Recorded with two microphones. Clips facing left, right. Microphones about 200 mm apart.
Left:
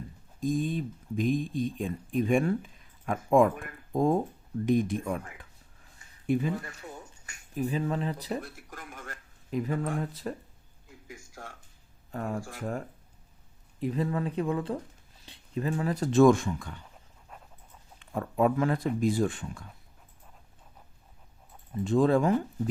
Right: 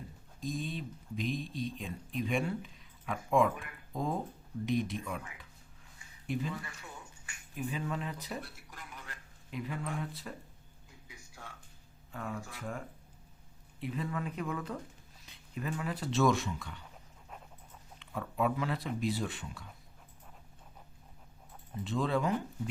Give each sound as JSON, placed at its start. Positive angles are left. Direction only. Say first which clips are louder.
{"t": 0.3, "sound": "speech", "louder": "left 9 dB", "side_deg": 50}
{"t": 8.4, "sound": "a sound", "louder": "left 6 dB", "side_deg": 50}
{"t": 11.1, "sound": "music", "louder": "left 7 dB", "side_deg": 45}
{"t": 12.1, "sound": "speech", "louder": "left 7 dB", "side_deg": 40}
{"t": 18.0, "sound": "speech", "louder": "left 7 dB", "side_deg": 45}
{"t": 21.8, "sound": "speech", "louder": "left 8 dB", "side_deg": 45}